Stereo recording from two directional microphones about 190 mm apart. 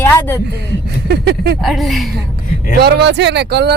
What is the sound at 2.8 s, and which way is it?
Speech, 60° right (ahead or behind).